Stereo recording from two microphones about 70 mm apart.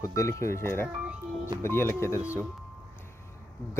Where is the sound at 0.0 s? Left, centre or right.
Left.